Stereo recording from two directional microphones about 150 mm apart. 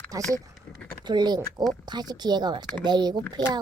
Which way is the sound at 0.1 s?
25° right (ahead or behind).